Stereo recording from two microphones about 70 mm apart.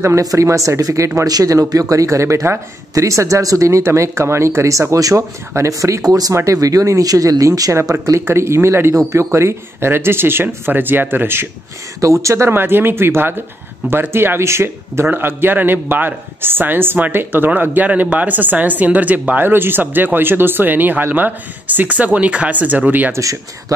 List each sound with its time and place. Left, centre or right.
0.0 s speech: right
4.9 s speech: right
6.0 s speech: right
6.3 s speech: right
7.9 s speech: right
12.0 s speech: right